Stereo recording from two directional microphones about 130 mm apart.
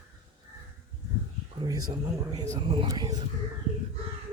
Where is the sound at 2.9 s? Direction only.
30° right (ahead or behind).